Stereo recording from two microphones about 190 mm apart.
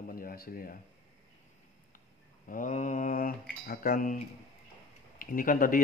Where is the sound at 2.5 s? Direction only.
45° left (ahead or behind).